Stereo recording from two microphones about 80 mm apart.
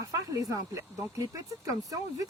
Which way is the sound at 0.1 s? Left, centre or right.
Right.